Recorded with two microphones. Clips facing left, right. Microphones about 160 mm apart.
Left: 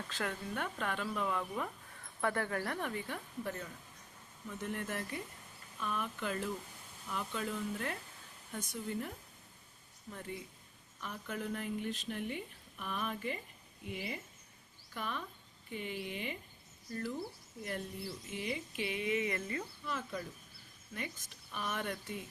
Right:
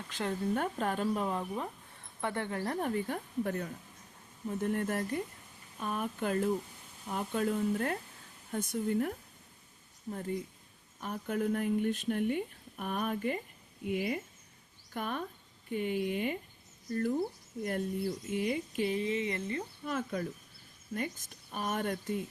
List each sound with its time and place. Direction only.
0.3 s speech: 40° right (ahead or behind); by 2.7 s 25° right (ahead or behind)
2.7 s speech: 40° right (ahead or behind)
10.1 s speech: 40° right (ahead or behind)
19.8 s speech: 50° right (ahead or behind)